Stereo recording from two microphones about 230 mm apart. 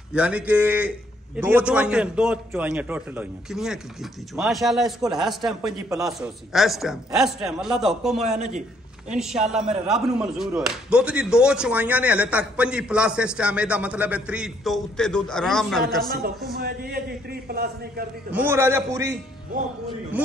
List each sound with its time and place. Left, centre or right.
0.1 s speech: centre
5.9 s a man's voice: centre
6.1 s speech: centre
8.2 s a man's voice: right
9.2 s speech: centre
16.5 s a man's voice: right
18.3 s a man's voice: centre
20.2 s a man's voice: centre